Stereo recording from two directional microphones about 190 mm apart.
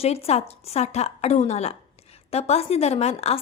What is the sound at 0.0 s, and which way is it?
A woman's voice, 35° left (ahead or behind).